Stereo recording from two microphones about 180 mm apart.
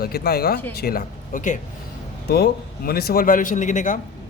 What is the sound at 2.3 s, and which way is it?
Speech, 60° left (ahead or behind).